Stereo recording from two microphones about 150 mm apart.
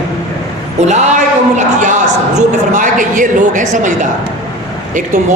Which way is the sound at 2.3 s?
55° right (ahead or behind).